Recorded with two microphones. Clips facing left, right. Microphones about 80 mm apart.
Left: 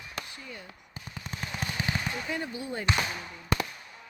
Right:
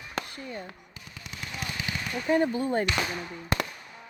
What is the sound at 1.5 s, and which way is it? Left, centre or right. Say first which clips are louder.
Firecracker: even; left.